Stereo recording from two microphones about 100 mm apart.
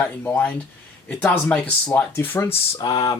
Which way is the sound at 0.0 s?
15° left (ahead or behind).